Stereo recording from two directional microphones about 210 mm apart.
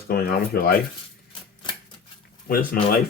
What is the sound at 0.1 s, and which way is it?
Speech, 45° left (ahead or behind).